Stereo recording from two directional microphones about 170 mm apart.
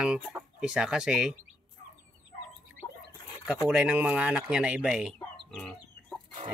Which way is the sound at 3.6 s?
5° right (ahead or behind).